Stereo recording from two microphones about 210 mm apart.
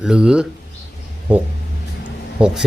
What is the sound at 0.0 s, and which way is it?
Speech, 5° right (ahead or behind).